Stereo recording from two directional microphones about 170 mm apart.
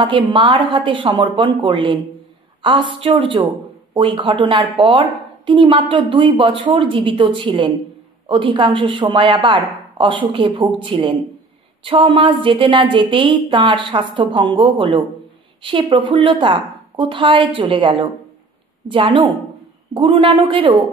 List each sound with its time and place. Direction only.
0.0 s a woman's voice: 30° right (ahead or behind)